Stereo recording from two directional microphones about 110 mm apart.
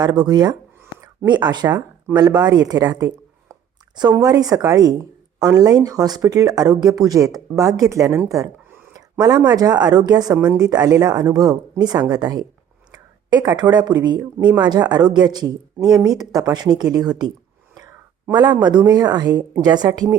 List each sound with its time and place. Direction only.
0.0 s speech: 40° right (ahead or behind)
4.2 s speech: 35° right (ahead or behind)
9.0 s a sound: 35° right (ahead or behind)
9.5 s speech: 35° right (ahead or behind)